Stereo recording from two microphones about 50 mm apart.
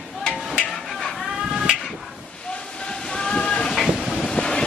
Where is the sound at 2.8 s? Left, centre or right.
Centre.